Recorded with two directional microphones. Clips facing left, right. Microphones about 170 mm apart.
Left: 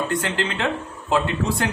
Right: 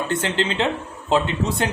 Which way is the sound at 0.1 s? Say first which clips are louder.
Right 2 dB; 25° right (ahead or behind).